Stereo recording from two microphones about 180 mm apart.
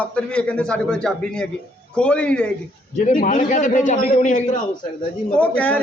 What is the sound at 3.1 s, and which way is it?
A man's voice, 50° left (ahead or behind).